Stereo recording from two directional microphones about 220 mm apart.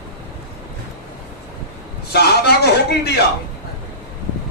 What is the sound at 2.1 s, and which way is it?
Speech, 45° left (ahead or behind).